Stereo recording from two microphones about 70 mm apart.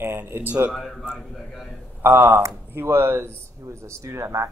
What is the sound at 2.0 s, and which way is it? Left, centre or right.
Speech, right.